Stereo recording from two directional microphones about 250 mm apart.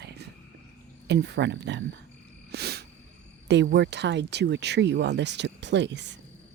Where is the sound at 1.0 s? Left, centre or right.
Right.